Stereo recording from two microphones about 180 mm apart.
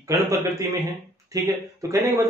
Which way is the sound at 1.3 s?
15° right (ahead or behind).